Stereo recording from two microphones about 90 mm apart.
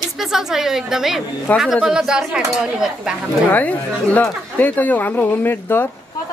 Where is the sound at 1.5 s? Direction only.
20° left (ahead or behind).